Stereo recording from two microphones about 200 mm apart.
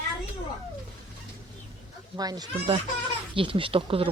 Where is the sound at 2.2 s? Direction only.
20° right (ahead or behind).